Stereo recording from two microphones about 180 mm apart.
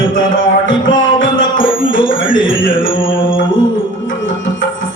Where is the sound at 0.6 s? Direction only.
90° left.